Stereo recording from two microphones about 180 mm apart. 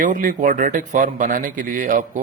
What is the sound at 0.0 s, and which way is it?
Speech, 50° right (ahead or behind).